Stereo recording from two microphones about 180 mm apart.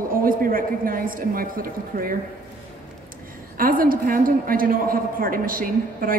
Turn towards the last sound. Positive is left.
turn(degrees=-50)  # may be behind; listen again after turning